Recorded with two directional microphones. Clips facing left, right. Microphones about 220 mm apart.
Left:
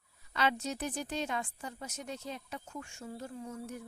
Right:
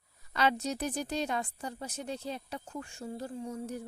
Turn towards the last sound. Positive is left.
turn(degrees=-35)  # may be behind; listen again after turning